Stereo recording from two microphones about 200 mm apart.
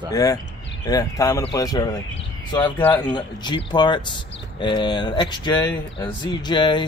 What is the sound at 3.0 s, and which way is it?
Speech, 20° left (ahead or behind).